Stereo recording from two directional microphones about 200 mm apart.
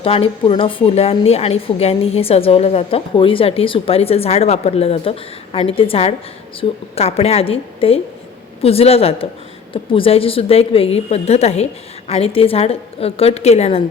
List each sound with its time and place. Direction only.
0.0 s a woman's voice: 25° left (ahead or behind)